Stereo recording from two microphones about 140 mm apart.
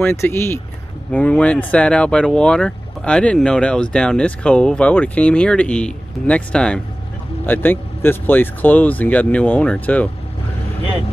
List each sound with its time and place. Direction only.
0.1 s speech: 20° left (ahead or behind)